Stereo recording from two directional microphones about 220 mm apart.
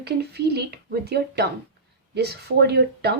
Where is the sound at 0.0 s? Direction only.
50° right (ahead or behind).